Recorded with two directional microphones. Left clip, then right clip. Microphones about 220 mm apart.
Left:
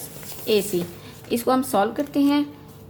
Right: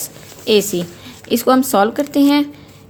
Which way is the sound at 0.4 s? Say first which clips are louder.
Right 7 dB; 30° right (ahead or behind).